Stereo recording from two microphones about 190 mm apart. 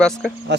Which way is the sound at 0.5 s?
65° right (ahead or behind).